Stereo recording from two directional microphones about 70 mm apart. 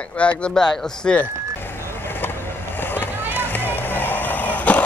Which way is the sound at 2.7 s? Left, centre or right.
Left.